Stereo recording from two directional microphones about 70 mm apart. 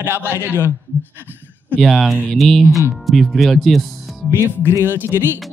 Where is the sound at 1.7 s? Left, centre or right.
Centre.